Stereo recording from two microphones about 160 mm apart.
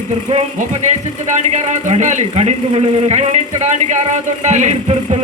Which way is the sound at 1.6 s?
45° right (ahead or behind).